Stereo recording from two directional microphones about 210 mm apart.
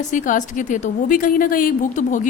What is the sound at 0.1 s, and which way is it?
A woman's voice, 35° left (ahead or behind).